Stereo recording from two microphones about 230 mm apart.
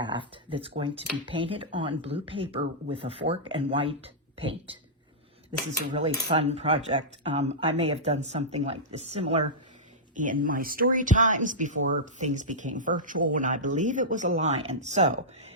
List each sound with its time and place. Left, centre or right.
0.0 s speech: right
6.3 s speech: right